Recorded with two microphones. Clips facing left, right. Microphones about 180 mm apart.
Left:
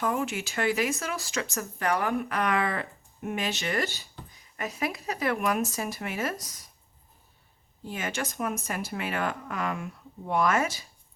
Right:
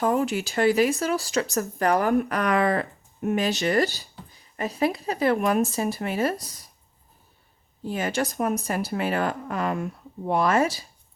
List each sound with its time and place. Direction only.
0.0 s speech: 35° right (ahead or behind)
7.9 s speech: 35° right (ahead or behind)